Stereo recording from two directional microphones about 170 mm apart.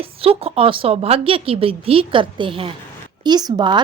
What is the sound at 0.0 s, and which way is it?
A woman's voice, 35° right (ahead or behind).